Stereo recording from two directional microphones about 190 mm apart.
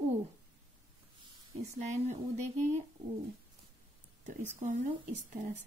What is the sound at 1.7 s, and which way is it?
Speech, 35° right (ahead or behind).